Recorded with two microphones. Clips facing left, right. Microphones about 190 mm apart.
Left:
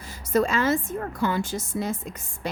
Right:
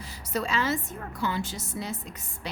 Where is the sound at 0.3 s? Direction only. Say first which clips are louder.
Left 6 dB; 50° left (ahead or behind).